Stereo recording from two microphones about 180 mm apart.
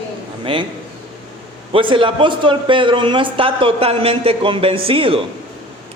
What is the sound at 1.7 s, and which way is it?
A man's voice, 30° right (ahead or behind).